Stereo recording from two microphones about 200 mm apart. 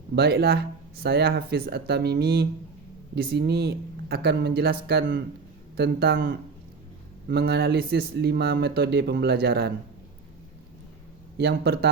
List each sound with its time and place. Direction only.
0.2 s speech: 55° right (ahead or behind)
11.3 s speech: 55° right (ahead or behind)